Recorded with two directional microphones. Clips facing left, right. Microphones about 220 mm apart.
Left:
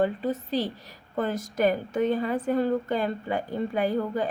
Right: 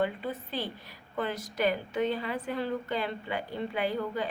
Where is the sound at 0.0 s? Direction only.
40° left (ahead or behind).